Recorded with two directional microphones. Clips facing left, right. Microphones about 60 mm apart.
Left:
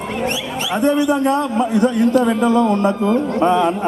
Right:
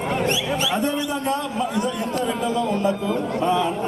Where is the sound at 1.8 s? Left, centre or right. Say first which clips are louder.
Left 9 dB; left.